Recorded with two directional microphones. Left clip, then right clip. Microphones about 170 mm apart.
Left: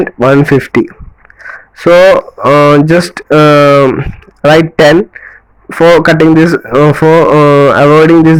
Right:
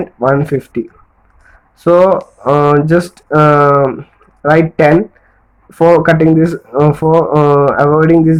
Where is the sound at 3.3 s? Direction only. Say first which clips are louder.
Left 4 dB; 65° left (ahead or behind).